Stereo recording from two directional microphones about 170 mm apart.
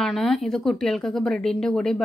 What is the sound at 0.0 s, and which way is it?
A woman's voice, centre (ahead or behind).